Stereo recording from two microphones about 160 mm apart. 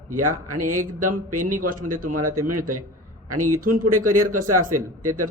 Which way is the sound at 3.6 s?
60° right (ahead or behind).